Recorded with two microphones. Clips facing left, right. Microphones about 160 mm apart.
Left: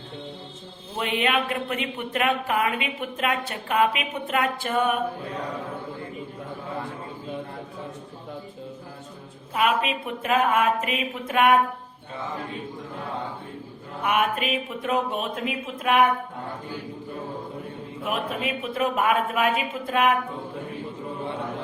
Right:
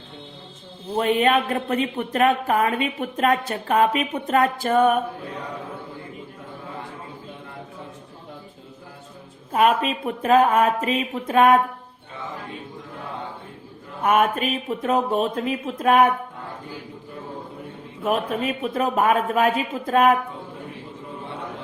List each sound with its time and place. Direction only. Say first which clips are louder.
0.9 s a woman's voice: right 6 dB; 40° right (ahead or behind)
9.5 s a woman's voice: right 4 dB; 40° right (ahead or behind)
14.0 s a woman's voice: right 4 dB; 40° right (ahead or behind)
18.0 s a woman's voice: right 5 dB; 40° right (ahead or behind)